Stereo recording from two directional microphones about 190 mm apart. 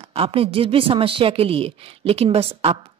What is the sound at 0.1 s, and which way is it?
A woman's voice, 30° right (ahead or behind).